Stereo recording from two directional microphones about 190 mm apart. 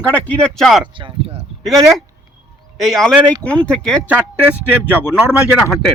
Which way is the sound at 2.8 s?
Centre (ahead or behind).